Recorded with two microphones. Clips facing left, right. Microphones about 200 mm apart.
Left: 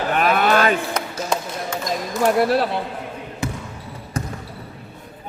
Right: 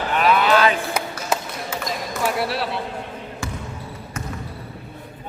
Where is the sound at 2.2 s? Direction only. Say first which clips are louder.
Left 7 dB; 45° left (ahead or behind).